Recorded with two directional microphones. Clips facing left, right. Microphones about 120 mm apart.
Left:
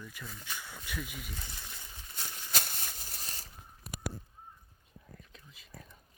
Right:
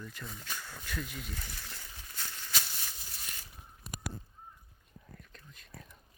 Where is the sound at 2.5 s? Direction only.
50° left (ahead or behind).